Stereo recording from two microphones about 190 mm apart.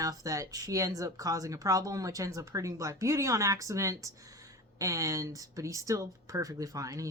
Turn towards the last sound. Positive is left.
turn(degrees=-15)  # may be behind; listen again after turning